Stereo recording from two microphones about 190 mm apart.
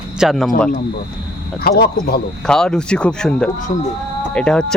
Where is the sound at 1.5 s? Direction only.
55° left (ahead or behind).